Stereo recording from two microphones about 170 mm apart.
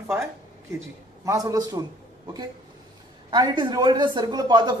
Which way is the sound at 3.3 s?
25° right (ahead or behind).